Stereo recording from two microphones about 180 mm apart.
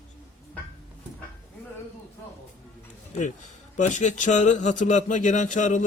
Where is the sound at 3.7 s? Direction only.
40° left (ahead or behind).